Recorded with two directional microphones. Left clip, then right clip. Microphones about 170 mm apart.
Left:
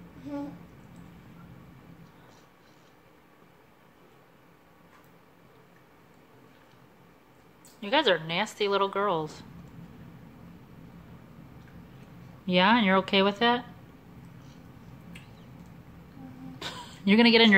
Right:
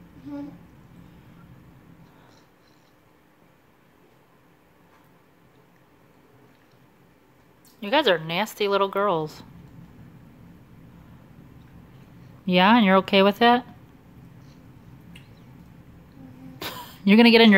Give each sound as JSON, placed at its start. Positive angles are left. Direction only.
{"t": 7.8, "sound": "speech", "side_deg": -30}
{"t": 12.4, "sound": "speech", "side_deg": -35}
{"t": 16.5, "sound": "a sound", "side_deg": -35}